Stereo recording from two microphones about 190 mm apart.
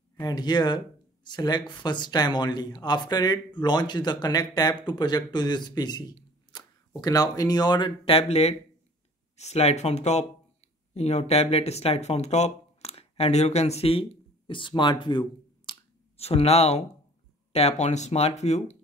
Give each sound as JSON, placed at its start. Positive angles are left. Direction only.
{"t": 0.2, "sound": "speech", "side_deg": 20}